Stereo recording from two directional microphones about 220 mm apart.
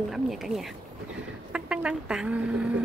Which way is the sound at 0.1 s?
Centre (ahead or behind).